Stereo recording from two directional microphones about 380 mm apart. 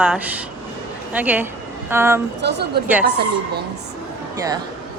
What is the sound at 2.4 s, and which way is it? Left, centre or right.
Speech, right.